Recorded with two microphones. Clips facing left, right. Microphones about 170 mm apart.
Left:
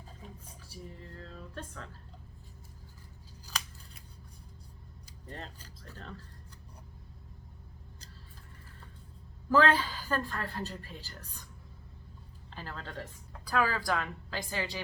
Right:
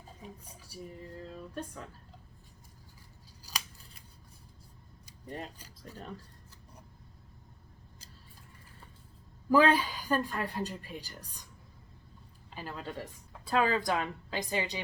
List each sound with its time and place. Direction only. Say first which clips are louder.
1.2 s music: right 4 dB; 15° right (ahead or behind)
5.2 s a woman's voice: right 4 dB; 10° right (ahead or behind)
9.5 s a woman's voice: right 2 dB; 15° right (ahead or behind)
12.5 s speech: right 3 dB; 15° right (ahead or behind)
13.4 s a woman's voice: right 2 dB; 25° right (ahead or behind)